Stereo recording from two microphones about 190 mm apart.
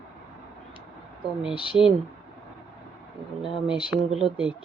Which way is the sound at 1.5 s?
25° left (ahead or behind).